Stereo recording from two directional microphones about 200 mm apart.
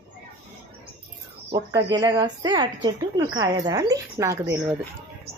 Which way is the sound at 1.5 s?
20° right (ahead or behind).